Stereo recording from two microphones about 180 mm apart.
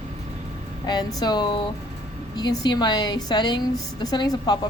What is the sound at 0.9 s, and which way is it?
A woman's voice, 25° left (ahead or behind).